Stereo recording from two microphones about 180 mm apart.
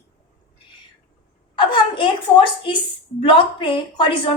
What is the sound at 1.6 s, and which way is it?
A woman's voice, 25° left (ahead or behind).